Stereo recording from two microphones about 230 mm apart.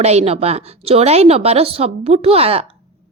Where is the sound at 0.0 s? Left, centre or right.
Right.